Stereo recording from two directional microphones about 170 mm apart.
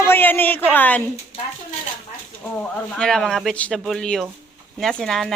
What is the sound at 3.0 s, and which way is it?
Speech, 5° left (ahead or behind).